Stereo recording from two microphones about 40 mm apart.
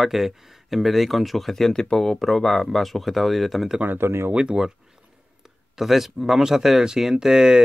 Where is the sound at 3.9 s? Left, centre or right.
Right.